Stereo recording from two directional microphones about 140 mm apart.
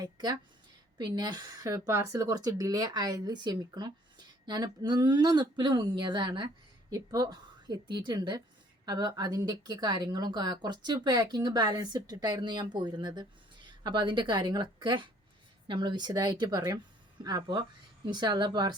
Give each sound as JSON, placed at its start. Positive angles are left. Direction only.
{"t": 0.0, "sound": "a woman's voice", "side_deg": -25}